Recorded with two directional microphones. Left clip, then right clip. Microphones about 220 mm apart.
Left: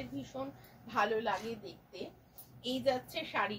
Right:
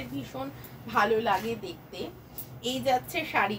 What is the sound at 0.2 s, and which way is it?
A woman's voice, 15° right (ahead or behind).